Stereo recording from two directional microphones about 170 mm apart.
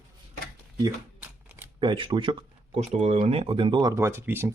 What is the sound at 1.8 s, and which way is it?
Speech, 30° right (ahead or behind).